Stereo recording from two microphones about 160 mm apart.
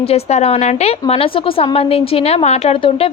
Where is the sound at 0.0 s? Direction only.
40° left (ahead or behind).